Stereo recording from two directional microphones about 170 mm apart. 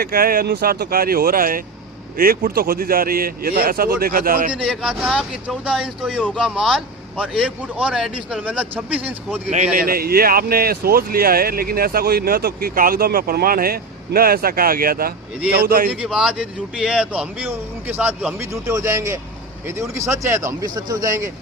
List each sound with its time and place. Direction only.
0.0 s speech: 60° right (ahead or behind)
4.5 s speech: 5° right (ahead or behind)
9.7 s speech: 60° right (ahead or behind)
16.0 s speech: 5° right (ahead or behind)